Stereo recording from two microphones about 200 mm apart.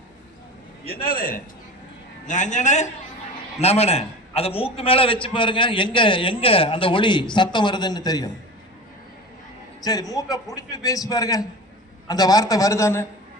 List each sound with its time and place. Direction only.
0.9 s a man's voice: 45° left (ahead or behind); by 8.3 s 20° left (ahead or behind)
9.8 s a man's voice: 20° left (ahead or behind)